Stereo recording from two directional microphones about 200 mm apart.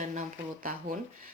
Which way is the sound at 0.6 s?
45° right (ahead or behind).